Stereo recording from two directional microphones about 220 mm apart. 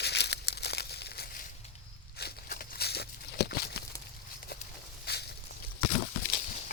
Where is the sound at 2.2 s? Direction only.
45° left (ahead or behind).